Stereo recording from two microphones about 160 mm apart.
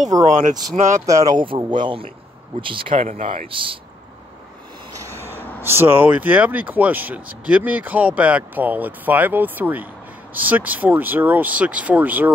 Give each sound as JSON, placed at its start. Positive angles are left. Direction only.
{"t": 0.2, "sound": "speech", "side_deg": -50}
{"t": 1.0, "sound": "speech", "side_deg": -20}
{"t": 5.1, "sound": "a sound", "side_deg": 15}
{"t": 5.6, "sound": "speech", "side_deg": -15}